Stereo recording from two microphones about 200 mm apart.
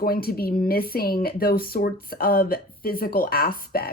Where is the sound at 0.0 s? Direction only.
45° left (ahead or behind).